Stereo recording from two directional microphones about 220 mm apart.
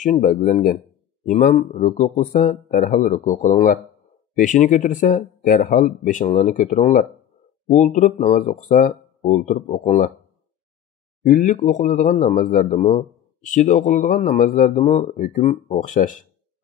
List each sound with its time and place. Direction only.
0.0 s a man's voice: 35° left (ahead or behind)
11.2 s a man's voice: 35° left (ahead or behind)
12.7 s a man's voice: 25° left (ahead or behind)